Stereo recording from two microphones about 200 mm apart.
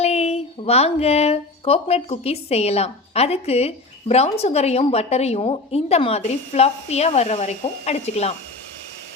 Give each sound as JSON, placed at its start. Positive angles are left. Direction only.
{"t": 0.0, "sound": "speech", "side_deg": 30}